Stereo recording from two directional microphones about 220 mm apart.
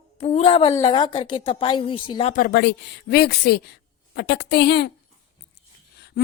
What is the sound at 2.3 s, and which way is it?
A woman's voice, 40° left (ahead or behind).